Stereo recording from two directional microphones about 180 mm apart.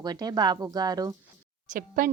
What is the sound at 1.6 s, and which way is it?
Speech, 50° right (ahead or behind).